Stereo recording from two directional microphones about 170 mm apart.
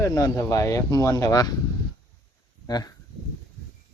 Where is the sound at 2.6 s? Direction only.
25° left (ahead or behind).